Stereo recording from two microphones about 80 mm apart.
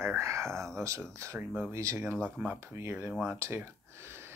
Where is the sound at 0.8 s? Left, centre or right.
Right.